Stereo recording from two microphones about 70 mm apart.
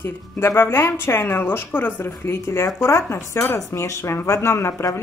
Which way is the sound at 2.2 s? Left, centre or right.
Left.